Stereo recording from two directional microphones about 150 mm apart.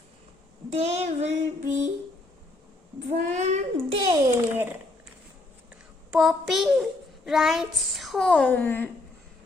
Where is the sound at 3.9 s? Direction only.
30° right (ahead or behind).